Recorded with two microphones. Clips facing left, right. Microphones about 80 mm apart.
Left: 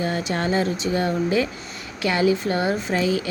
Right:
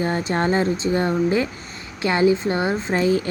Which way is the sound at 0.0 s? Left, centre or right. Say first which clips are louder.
Right 3 dB; right.